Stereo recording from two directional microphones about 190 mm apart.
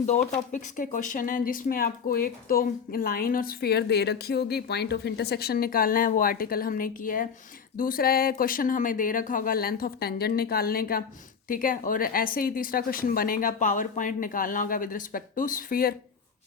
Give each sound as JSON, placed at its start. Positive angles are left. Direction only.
{"t": 0.5, "sound": "speech", "side_deg": 45}